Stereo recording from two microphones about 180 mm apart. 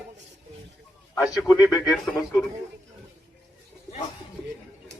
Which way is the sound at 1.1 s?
10° left (ahead or behind).